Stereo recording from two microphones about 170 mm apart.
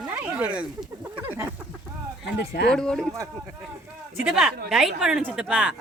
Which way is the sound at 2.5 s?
75° left (ahead or behind).